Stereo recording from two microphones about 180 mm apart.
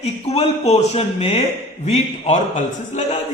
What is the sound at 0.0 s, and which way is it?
Speech, 35° left (ahead or behind).